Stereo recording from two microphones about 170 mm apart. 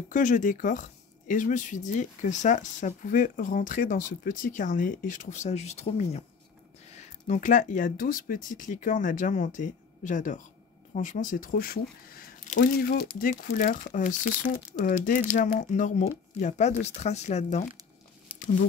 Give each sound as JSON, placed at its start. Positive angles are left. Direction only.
{"t": 0.1, "sound": "speech", "side_deg": 50}